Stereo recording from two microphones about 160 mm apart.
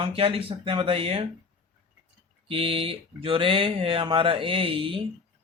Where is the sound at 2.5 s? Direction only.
35° right (ahead or behind).